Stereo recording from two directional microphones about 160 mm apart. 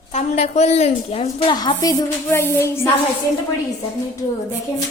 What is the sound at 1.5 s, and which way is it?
A woman's voice, 25° left (ahead or behind).